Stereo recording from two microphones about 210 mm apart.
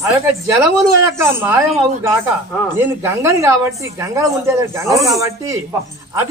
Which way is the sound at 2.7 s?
15° right (ahead or behind).